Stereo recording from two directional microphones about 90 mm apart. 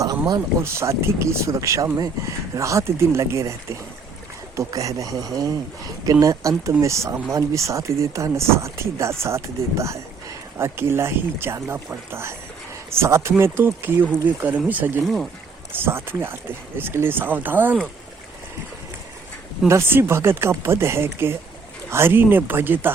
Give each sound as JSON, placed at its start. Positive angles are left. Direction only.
{"t": 0.0, "sound": "a sound", "side_deg": -45}
{"t": 0.6, "sound": "speech", "side_deg": -30}
{"t": 15.0, "sound": "speech", "side_deg": 5}
{"t": 15.7, "sound": "speech", "side_deg": -25}
{"t": 19.6, "sound": "speech", "side_deg": -30}